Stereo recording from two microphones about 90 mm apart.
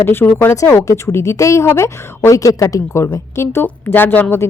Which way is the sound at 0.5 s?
35° left (ahead or behind).